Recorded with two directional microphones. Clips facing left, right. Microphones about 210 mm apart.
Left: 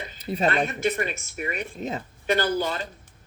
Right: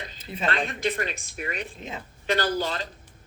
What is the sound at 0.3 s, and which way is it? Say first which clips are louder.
Speech: left 9 dB; 40° left (ahead or behind).